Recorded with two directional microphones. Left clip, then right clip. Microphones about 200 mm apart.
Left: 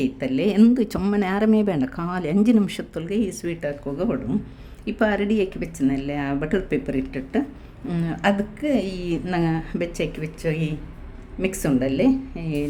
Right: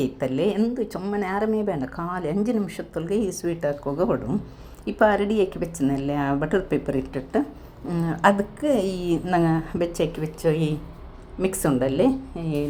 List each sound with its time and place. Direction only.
0.0 s speech: 5° left (ahead or behind)
0.9 s speech: 35° left (ahead or behind); by 3.1 s 20° left (ahead or behind)
3.1 s speech: 5° left (ahead or behind)
9.2 s speech: 10° left (ahead or behind)